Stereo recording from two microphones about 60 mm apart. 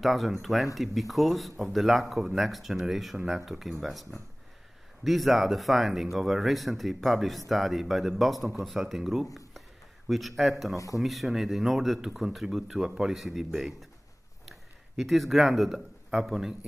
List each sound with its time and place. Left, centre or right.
0.0 s a man's voice: centre